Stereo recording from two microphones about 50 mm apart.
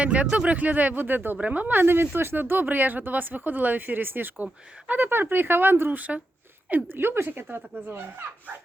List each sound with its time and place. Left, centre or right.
0.0 s speech: right
1.4 s speech: right
1.9 s speech: right
5.9 s speech: right